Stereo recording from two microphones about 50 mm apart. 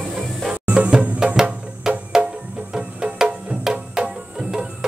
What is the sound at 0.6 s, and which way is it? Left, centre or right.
Music, right.